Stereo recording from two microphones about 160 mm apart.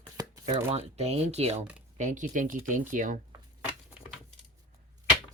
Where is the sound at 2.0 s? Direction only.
50° right (ahead or behind).